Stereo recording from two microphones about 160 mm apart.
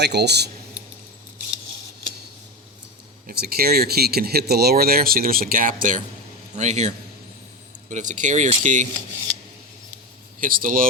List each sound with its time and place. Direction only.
0.0 s speech: 90° right
3.2 s speech: 70° right (ahead or behind)
6.6 s speech: 45° right (ahead or behind)
10.4 s speech: 60° right (ahead or behind)